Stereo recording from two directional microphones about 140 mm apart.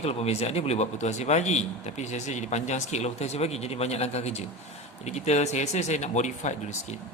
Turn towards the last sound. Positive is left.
turn(degrees=55)  # may be behind; listen again after turning